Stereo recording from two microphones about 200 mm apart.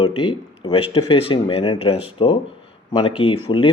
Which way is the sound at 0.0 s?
25° left (ahead or behind).